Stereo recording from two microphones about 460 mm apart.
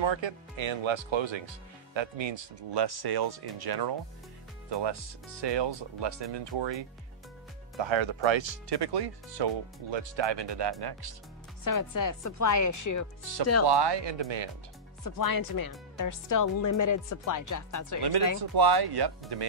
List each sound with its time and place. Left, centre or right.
0.0 s speech: right
11.6 s speech: left
13.7 s speech: right
15.0 s speech: left
18.4 s speech: right